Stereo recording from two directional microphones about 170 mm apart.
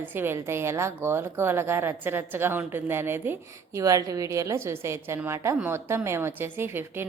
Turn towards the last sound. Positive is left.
turn(degrees=-15)  # may be behind; listen again after turning